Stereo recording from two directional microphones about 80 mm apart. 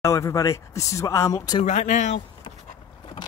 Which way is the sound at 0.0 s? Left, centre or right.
Left.